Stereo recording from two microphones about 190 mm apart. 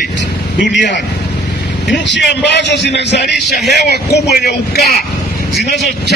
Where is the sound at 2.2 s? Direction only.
65° left (ahead or behind).